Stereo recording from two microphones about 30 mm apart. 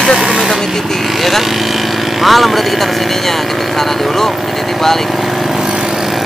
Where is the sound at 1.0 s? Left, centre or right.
Centre.